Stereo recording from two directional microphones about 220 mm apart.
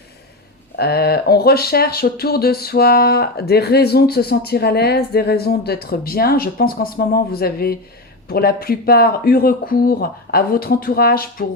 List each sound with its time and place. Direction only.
0.8 s speech: 45° left (ahead or behind)